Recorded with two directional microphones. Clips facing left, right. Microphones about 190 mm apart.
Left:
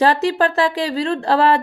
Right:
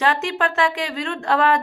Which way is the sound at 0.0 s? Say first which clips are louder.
Left 5 dB; 35° left (ahead or behind).